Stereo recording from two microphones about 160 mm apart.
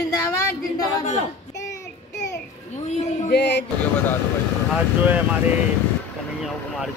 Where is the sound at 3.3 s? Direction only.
90° left.